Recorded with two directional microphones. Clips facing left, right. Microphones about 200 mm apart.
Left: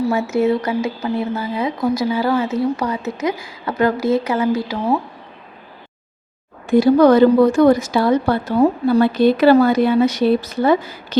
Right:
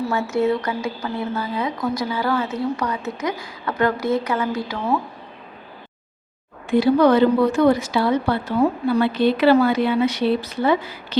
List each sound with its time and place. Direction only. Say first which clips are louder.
0.1 s speech: left 3 dB; 20° left (ahead or behind)
6.7 s speech: left 4 dB; 45° left (ahead or behind)